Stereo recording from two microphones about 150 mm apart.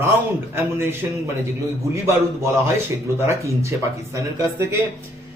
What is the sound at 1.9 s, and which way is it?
Speech, 20° right (ahead or behind).